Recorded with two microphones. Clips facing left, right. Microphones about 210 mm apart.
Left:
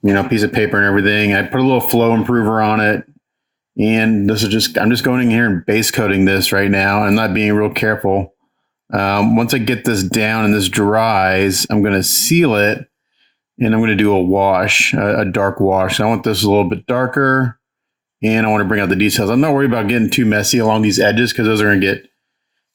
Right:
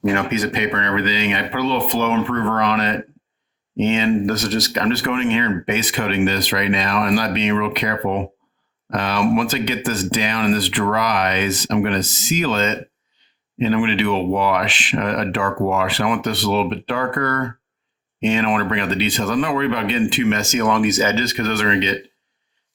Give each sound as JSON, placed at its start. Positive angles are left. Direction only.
{"t": 0.1, "sound": "speech", "side_deg": 35}